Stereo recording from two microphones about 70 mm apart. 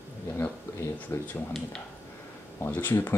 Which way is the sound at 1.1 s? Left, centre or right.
Left.